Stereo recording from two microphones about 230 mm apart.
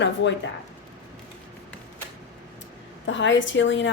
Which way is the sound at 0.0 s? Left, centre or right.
Left.